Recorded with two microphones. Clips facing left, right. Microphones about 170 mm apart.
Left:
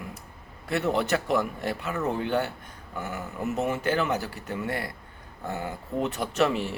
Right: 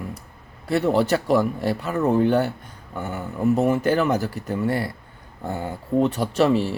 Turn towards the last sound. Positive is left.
turn(degrees=-30)  # may be behind; listen again after turning